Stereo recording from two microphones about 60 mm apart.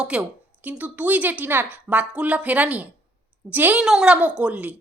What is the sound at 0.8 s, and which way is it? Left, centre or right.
Speech, right.